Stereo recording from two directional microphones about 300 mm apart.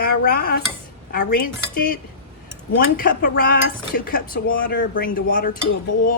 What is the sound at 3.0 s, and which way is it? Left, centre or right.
Speech, left.